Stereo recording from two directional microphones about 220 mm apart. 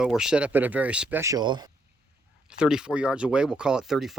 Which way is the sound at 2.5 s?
5° right (ahead or behind).